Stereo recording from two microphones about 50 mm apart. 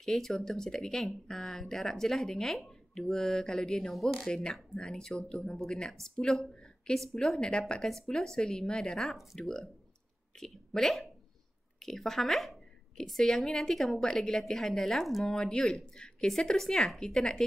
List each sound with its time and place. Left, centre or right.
0.0 s speech: centre
4.3 s a woman's voice: centre
15.2 s speech: centre